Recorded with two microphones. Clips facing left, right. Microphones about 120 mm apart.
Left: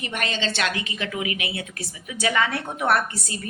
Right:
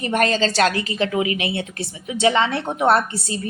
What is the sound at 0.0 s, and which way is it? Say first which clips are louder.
A woman's voice: right 9 dB; 40° right (ahead or behind).